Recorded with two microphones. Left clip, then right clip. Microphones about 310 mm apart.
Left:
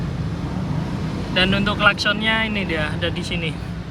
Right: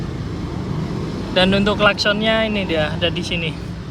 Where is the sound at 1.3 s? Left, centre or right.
Centre.